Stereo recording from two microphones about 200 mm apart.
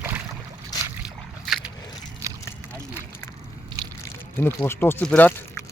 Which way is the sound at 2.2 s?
15° right (ahead or behind).